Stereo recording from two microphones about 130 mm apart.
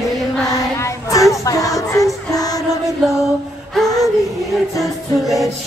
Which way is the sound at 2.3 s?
30° left (ahead or behind).